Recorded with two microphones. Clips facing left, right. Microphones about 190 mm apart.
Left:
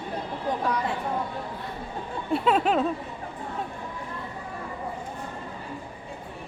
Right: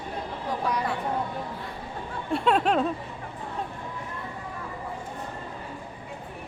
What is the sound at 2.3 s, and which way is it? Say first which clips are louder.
Speech: even; centre (ahead or behind).